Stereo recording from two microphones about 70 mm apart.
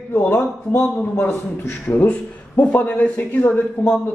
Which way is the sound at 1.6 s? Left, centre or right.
Left.